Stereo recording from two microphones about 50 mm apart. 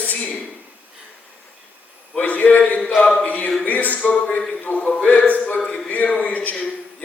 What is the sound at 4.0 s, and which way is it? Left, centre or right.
A man's voice, left.